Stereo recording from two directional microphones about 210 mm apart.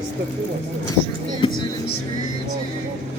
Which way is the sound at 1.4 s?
25° left (ahead or behind).